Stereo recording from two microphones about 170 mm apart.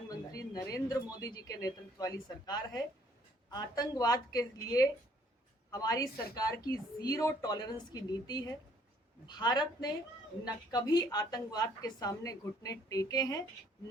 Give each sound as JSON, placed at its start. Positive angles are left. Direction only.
{"t": 0.1, "sound": "speech", "side_deg": 20}